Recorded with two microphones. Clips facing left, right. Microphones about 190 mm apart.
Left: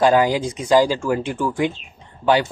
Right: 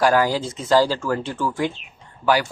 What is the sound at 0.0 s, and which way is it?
Speech, 20° left (ahead or behind).